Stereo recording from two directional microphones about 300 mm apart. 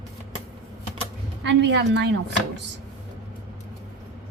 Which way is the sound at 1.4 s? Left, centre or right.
Right.